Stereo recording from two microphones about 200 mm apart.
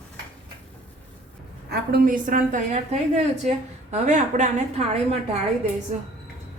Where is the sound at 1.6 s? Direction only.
50° right (ahead or behind); by 6.1 s 35° right (ahead or behind).